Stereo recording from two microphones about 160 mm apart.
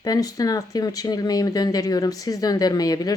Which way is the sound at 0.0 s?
25° left (ahead or behind).